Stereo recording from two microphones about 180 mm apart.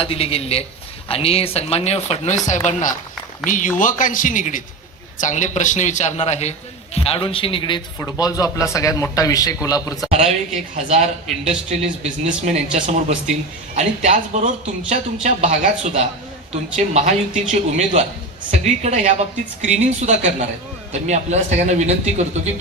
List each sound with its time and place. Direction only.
0.0 s a man's voice: 30° left (ahead or behind)
10.1 s speech: 35° right (ahead or behind)